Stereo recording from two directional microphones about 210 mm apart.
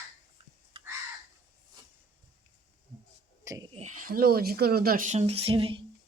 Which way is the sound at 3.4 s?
15° right (ahead or behind).